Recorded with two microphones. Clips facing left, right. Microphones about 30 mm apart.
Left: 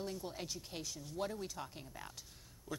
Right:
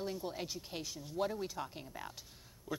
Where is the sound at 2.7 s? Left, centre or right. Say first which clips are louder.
Right 3 dB; centre.